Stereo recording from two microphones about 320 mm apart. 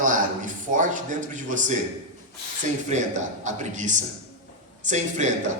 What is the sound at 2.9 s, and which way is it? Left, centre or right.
A man's voice, right.